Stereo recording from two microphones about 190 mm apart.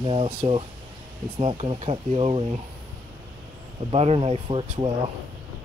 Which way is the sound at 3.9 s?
30° right (ahead or behind).